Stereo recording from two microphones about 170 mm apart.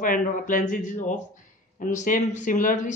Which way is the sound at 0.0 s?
55° left (ahead or behind).